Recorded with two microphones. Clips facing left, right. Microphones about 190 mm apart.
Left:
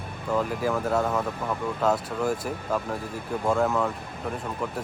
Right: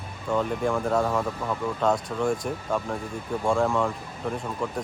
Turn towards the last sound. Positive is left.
turn(degrees=5)  # may be behind; listen again after turning